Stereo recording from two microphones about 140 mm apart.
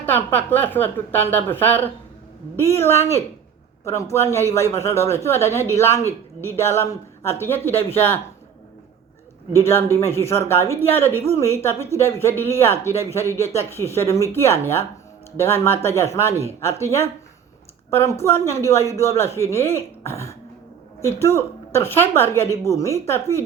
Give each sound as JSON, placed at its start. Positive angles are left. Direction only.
{"t": 0.0, "sound": "a man's voice", "side_deg": 15}
{"t": 9.6, "sound": "a man's voice", "side_deg": 15}